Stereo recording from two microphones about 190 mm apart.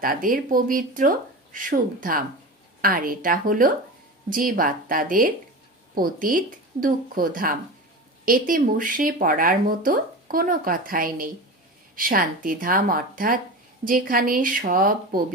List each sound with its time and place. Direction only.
0.0 s speech: 45° right (ahead or behind)